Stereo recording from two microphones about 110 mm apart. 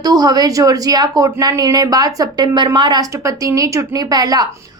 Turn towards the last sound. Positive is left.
turn(degrees=-35)  # may be behind; listen again after turning